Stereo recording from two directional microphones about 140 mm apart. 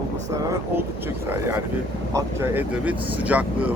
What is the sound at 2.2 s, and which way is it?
Speech, 15° right (ahead or behind).